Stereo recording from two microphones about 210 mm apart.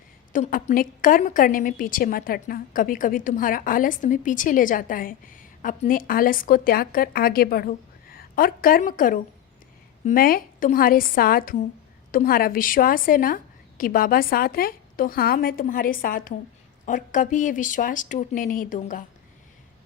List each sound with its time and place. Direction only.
0.3 s a woman's voice: 35° left (ahead or behind)